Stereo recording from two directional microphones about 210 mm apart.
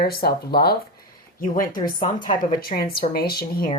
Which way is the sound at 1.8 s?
20° left (ahead or behind).